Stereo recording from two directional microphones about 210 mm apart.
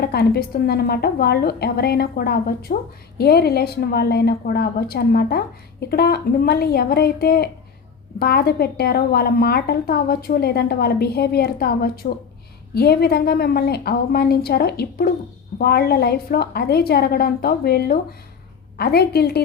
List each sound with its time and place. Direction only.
0.0 s a woman's voice: 50° left (ahead or behind)